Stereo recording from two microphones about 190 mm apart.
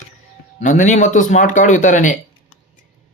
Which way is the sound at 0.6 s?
40° left (ahead or behind).